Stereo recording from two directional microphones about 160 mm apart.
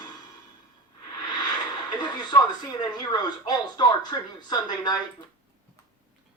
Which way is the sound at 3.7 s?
25° left (ahead or behind).